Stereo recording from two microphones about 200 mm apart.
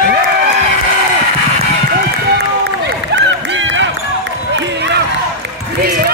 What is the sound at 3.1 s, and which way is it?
Run, 65° right (ahead or behind).